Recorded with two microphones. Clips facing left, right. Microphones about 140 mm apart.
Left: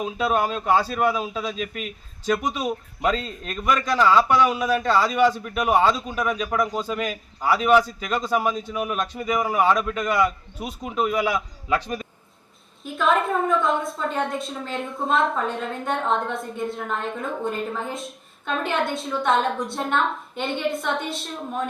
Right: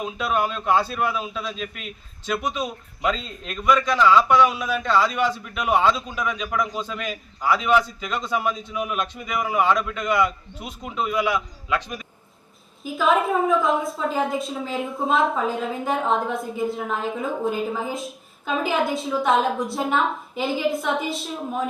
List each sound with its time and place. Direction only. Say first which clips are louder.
0.2 s a man's voice: left 2 dB; 40° left (ahead or behind)
12.8 s a woman's voice: right 1 dB; centre (ahead or behind)